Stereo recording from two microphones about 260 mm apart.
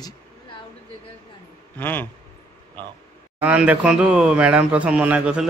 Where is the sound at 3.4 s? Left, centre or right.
Centre.